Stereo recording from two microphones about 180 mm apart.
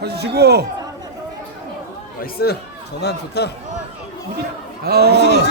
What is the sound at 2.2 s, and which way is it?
A man's voice, 60° left (ahead or behind).